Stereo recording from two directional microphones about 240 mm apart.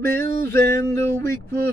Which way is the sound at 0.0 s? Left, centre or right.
Centre.